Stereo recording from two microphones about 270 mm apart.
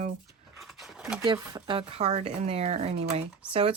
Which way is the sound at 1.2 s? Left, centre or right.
Centre.